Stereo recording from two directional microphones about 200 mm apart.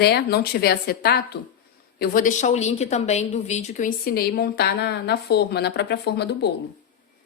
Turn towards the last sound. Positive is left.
turn(degrees=55)  # may be behind; listen again after turning